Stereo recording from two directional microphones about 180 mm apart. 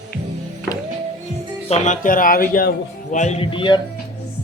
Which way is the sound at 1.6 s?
40° left (ahead or behind).